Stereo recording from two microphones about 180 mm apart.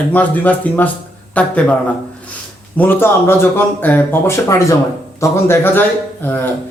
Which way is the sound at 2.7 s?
10° left (ahead or behind).